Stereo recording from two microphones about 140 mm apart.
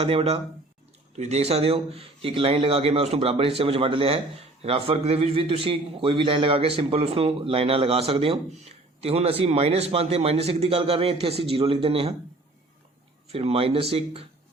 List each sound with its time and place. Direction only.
0.0 s speech: 45° right (ahead or behind)
13.3 s speech: 45° right (ahead or behind)